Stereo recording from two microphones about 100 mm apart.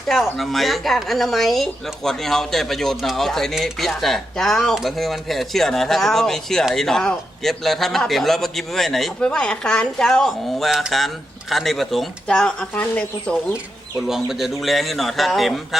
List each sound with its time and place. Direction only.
0.1 s speech: centre (ahead or behind)
14.1 s speech: centre (ahead or behind)